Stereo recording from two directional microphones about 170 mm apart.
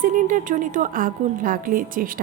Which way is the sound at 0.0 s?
50° right (ahead or behind).